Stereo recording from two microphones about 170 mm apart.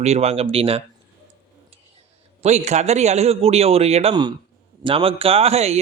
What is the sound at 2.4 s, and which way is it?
A man's voice, 40° right (ahead or behind).